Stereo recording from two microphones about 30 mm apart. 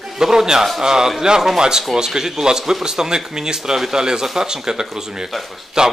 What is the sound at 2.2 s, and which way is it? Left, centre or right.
A man's voice, centre.